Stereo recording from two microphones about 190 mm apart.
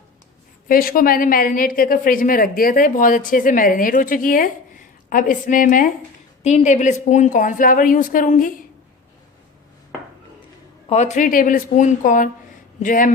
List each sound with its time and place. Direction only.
0.7 s a woman's voice: 50° left (ahead or behind)
6.4 s a woman's voice: 35° left (ahead or behind)
10.8 s a woman's voice: 35° left (ahead or behind)